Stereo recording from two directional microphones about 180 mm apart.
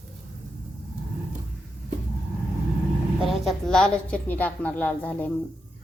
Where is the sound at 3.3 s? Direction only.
Centre (ahead or behind).